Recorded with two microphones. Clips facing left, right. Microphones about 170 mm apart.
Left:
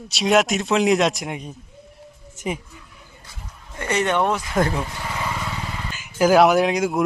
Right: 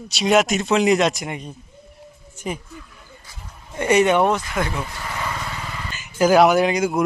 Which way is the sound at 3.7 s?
15° right (ahead or behind).